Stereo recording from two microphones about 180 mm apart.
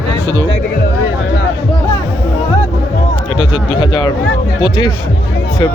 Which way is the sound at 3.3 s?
25° left (ahead or behind).